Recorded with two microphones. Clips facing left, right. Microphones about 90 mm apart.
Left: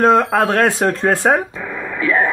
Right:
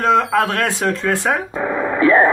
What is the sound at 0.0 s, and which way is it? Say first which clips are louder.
Speech: left 2 dB; 35° left (ahead or behind).